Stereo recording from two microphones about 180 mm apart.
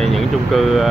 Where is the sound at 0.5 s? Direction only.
Centre (ahead or behind).